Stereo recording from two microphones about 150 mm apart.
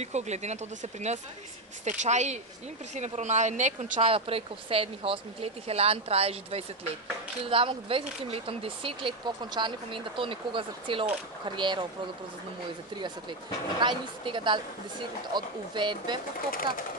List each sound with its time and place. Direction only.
0.0 s speech: 50° right (ahead or behind)
4.0 s speech: 40° right (ahead or behind)
13.7 s speech: 30° right (ahead or behind)
16.3 s speech: 70° left (ahead or behind)